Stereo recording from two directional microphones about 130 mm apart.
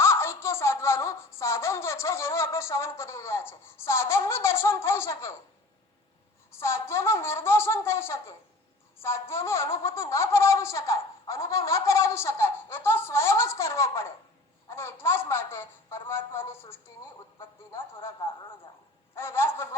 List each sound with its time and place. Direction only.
0.0 s speech: 20° left (ahead or behind)
6.6 s speech: 20° left (ahead or behind)
19.1 s speech: 20° left (ahead or behind)